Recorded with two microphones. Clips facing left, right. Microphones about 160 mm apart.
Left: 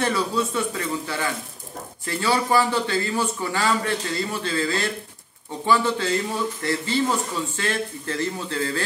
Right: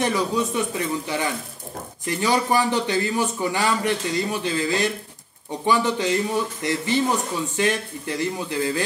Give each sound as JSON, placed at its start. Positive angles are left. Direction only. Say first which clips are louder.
{"t": 0.0, "sound": "a man's voice", "louder": "right 1 dB", "side_deg": -15}